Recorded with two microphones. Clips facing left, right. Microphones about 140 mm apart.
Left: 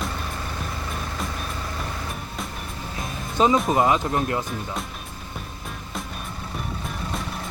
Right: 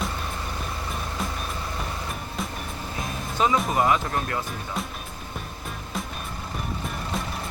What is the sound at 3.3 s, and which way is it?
Speech, 20° left (ahead or behind).